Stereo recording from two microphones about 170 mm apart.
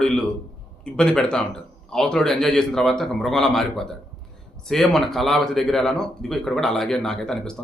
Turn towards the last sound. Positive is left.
turn(degrees=5)  # may be behind; listen again after turning